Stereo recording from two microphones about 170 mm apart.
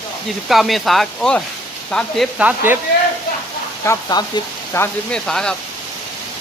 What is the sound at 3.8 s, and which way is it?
Speech, 25° left (ahead or behind).